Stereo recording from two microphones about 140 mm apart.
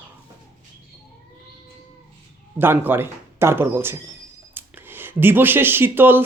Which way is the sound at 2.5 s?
15° right (ahead or behind).